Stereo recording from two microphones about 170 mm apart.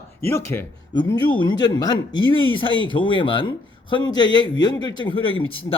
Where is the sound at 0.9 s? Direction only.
25° left (ahead or behind).